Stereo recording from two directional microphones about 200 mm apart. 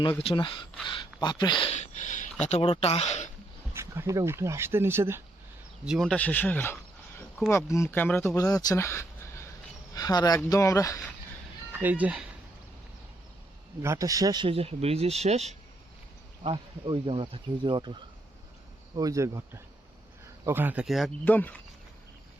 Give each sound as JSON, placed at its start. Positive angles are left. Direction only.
{"t": 0.2, "sound": "speech", "side_deg": 25}
{"t": 3.8, "sound": "speech", "side_deg": -15}
{"t": 5.8, "sound": "speech", "side_deg": 0}
{"t": 11.7, "sound": "speech", "side_deg": -10}
{"t": 13.8, "sound": "speech", "side_deg": -15}
{"t": 18.9, "sound": "speech", "side_deg": -15}